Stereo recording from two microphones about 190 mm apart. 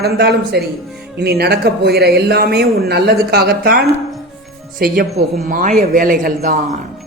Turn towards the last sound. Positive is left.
turn(degrees=-45)  # may be behind; listen again after turning